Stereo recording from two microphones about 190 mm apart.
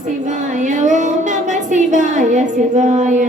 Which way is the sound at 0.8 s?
40° right (ahead or behind).